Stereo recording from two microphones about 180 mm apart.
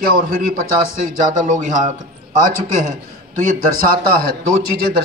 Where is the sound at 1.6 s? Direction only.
45° right (ahead or behind).